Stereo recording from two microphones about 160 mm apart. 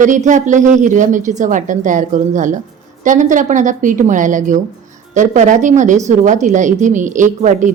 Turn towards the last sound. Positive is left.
turn(degrees=-50)  # may be behind; listen again after turning